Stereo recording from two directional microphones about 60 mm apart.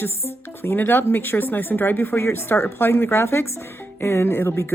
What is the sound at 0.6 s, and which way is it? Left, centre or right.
Speech, left.